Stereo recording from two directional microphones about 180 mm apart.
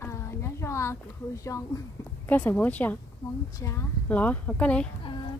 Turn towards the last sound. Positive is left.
turn(degrees=5)  # may be behind; listen again after turning